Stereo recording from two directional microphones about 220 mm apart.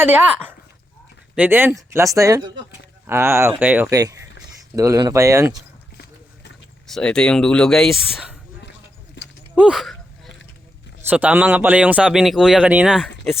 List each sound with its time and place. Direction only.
1.4 s speech: 10° right (ahead or behind)
6.8 s speech: centre (ahead or behind)
9.2 s horse: 55° left (ahead or behind)
9.6 s a sound: centre (ahead or behind)
11.1 s speech: 5° right (ahead or behind)